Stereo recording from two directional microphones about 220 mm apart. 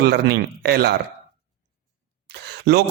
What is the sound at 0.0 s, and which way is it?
Speech, 50° right (ahead or behind).